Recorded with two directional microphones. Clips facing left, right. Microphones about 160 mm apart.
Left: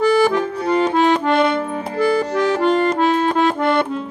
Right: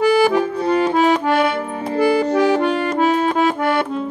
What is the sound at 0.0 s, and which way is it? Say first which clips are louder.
Accordion: right 1 dB; 10° right (ahead or behind).